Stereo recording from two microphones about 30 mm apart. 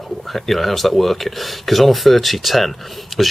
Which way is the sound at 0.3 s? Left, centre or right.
Centre.